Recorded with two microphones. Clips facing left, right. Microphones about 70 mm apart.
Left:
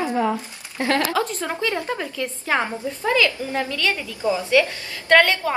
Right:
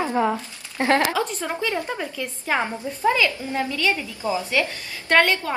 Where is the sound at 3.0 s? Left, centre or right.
Right.